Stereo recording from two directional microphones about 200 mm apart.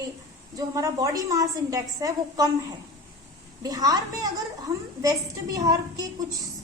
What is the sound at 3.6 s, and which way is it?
A woman's voice, 20° right (ahead or behind).